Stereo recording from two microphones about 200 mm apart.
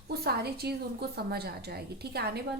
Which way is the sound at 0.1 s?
50° right (ahead or behind).